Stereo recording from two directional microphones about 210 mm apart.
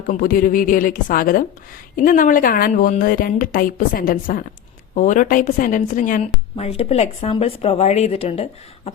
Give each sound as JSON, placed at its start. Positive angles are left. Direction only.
{"t": 0.1, "sound": "a woman's voice", "side_deg": 40}